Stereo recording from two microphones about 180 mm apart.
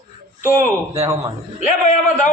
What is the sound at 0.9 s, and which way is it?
Speech, 15° right (ahead or behind).